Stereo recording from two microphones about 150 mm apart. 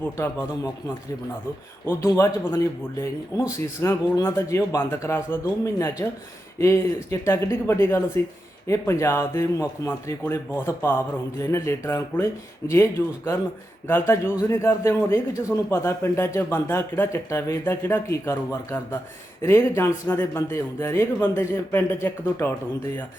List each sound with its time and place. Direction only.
0.0 s a man's voice: 15° left (ahead or behind)
1.9 s a man's voice: 20° left (ahead or behind)
14.5 s a man's voice: 15° left (ahead or behind)